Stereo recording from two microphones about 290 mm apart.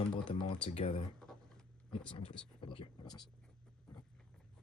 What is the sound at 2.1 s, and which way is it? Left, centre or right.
Speech, centre.